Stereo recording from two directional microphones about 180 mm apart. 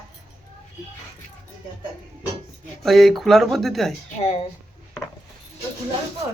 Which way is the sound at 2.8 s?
Centre (ahead or behind).